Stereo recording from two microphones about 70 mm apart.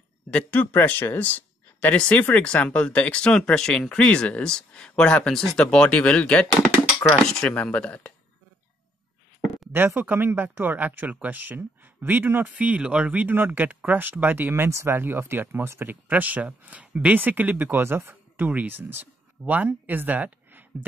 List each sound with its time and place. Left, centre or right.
0.3 s speech: centre
7.4 s speech: centre
9.7 s speech: right